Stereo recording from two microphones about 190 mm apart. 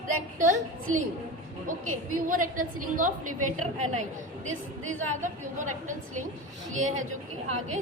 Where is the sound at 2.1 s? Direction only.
45° right (ahead or behind).